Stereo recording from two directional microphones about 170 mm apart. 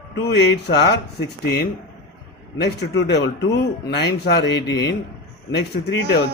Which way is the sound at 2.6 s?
85° left.